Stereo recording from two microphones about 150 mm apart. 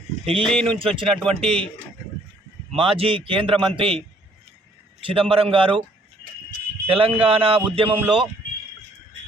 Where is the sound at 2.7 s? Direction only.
40° right (ahead or behind).